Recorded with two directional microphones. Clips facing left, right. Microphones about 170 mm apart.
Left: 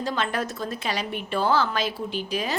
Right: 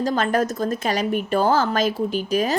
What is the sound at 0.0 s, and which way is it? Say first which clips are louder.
Speech: right 7 dB; 45° right (ahead or behind).